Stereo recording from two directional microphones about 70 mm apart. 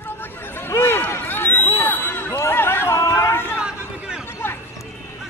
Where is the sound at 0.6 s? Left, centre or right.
Left.